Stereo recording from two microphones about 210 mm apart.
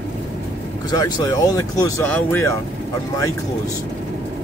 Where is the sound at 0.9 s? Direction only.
15° left (ahead or behind).